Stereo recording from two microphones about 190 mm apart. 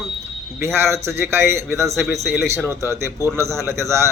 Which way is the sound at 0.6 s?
15° right (ahead or behind).